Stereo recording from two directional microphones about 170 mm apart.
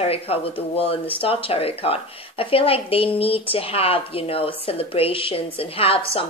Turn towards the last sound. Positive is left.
turn(degrees=35)  # may be behind; listen again after turning